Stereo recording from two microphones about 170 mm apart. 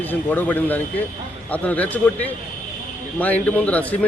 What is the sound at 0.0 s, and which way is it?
Speech, 10° left (ahead or behind).